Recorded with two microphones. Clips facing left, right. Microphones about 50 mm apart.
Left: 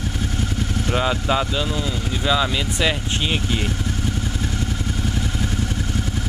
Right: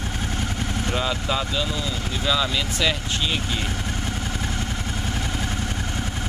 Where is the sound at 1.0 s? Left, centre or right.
Centre.